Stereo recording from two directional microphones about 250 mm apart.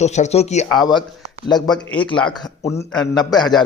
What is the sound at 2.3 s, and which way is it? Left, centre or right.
A man's voice, centre.